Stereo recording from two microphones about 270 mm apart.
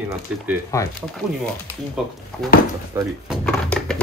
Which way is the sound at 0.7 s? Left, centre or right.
Centre.